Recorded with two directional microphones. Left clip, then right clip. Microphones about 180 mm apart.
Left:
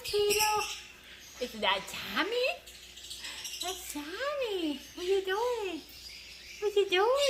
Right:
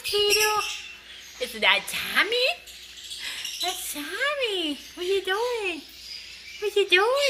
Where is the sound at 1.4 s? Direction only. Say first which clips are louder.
Right 8 dB; 15° right (ahead or behind).